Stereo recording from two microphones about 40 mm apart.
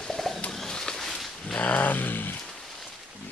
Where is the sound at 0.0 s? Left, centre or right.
Centre.